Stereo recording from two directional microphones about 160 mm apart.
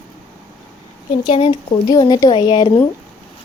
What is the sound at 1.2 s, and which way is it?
Speech, 35° left (ahead or behind).